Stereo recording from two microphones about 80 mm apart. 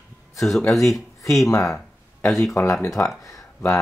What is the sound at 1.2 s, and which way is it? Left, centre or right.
Speech, left.